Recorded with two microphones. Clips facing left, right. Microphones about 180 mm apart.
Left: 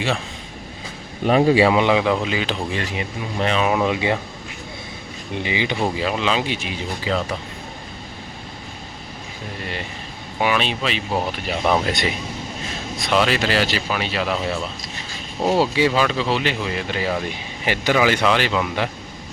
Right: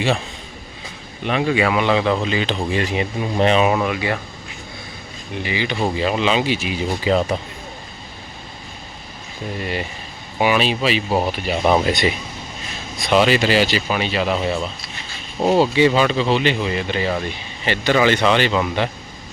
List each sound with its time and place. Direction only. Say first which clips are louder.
1.2 s speech: left 4 dB; 35° left (ahead or behind)
1.9 s speech: even; 10° left (ahead or behind)
2.9 s speech: right 5 dB; 25° right (ahead or behind)
3.8 s speech: left 1 dB; 20° left (ahead or behind)
5.3 s speech: even; 20° left (ahead or behind)
6.0 s speech: right 3 dB; centre (ahead or behind)
10.4 s speech: right 4 dB; 5° right (ahead or behind)